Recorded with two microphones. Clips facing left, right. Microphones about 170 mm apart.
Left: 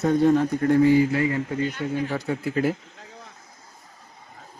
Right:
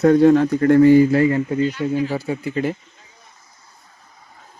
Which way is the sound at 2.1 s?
5° right (ahead or behind).